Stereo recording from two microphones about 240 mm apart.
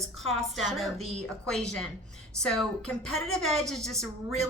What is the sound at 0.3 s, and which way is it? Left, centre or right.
A woman's voice, centre.